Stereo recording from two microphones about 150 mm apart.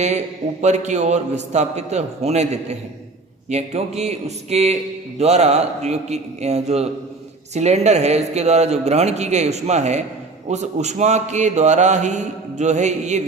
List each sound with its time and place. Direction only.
0.6 s mantra: 50° right (ahead or behind)